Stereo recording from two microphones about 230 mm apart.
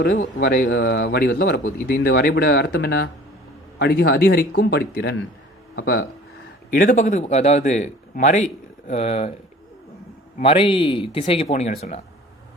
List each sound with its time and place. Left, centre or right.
0.0 s a man's voice: left
10.4 s speech: left